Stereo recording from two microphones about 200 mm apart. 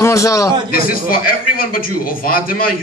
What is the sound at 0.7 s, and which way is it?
Speech, 45° left (ahead or behind).